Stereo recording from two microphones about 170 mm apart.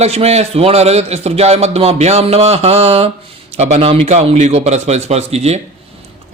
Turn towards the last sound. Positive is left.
turn(degrees=-40)  # may be behind; listen again after turning